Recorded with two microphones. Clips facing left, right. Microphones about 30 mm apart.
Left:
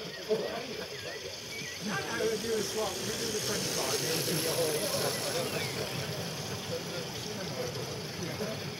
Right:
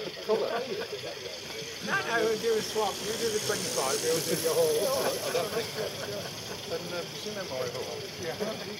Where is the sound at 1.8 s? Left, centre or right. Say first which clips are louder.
Right 5 dB; right; by 4.1 s centre.